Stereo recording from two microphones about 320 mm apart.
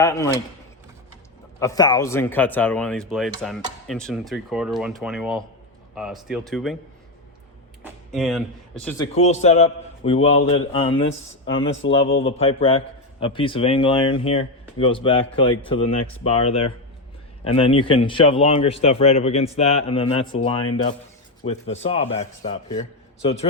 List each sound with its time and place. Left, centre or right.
0.0 s a man's voice: centre
1.5 s speech: centre
7.9 s speech: centre
9.1 s a man's voice: left